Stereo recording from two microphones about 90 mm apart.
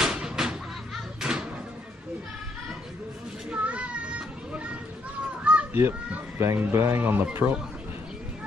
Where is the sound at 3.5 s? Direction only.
15° right (ahead or behind).